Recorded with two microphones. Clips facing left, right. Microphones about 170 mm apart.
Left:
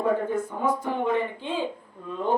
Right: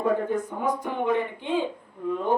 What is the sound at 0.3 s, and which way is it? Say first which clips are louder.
A woman's voice: left 1 dB; 15° right (ahead or behind).